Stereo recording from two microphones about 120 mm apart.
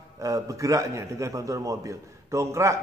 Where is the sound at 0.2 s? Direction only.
30° right (ahead or behind).